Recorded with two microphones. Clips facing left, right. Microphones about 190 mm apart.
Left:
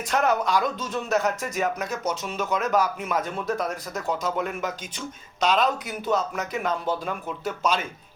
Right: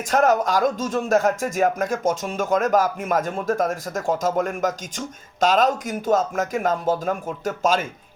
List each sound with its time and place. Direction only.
0.1 s speech: 45° right (ahead or behind)